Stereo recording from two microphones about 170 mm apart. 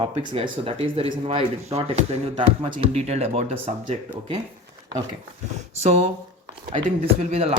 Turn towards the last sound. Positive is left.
turn(degrees=-40)  # may be behind; listen again after turning